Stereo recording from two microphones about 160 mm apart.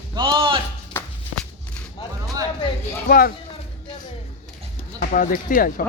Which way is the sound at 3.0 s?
65° left (ahead or behind).